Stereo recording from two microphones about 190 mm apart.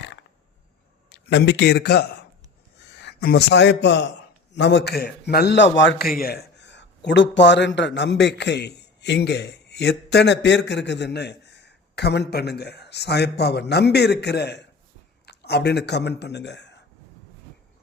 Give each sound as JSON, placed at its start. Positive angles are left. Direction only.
{"t": 1.1, "sound": "a man's voice", "side_deg": 65}
{"t": 5.7, "sound": "a man's voice", "side_deg": 70}
{"t": 6.1, "sound": "a man's voice", "side_deg": 50}